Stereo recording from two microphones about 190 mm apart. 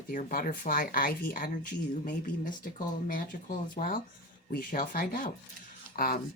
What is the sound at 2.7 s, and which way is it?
Speech, 45° left (ahead or behind).